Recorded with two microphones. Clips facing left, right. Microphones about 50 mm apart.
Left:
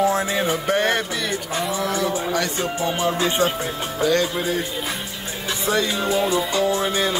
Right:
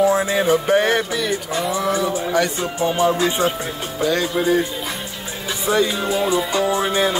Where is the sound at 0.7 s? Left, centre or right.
Centre.